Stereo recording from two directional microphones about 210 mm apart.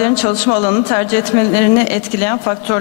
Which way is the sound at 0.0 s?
15° left (ahead or behind).